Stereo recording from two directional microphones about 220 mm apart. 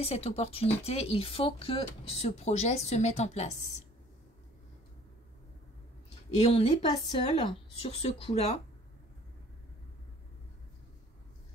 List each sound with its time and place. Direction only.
0.0 s speech: 25° left (ahead or behind)
6.4 s speech: 25° left (ahead or behind)